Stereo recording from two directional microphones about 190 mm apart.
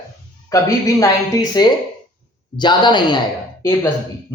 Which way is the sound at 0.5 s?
20° left (ahead or behind).